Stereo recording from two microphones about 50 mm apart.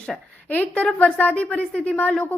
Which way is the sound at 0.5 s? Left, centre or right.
Left.